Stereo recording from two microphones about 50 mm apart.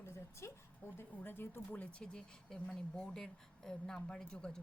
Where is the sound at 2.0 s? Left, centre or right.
Centre.